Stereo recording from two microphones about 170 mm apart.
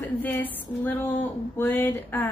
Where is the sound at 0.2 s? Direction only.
10° left (ahead or behind).